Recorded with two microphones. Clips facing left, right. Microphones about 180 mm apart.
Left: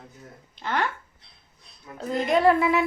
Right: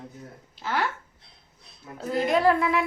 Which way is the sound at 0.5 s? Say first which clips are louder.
Left 1 dB; 5° right (ahead or behind).